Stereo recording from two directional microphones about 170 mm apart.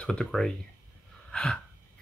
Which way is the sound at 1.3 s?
5° left (ahead or behind).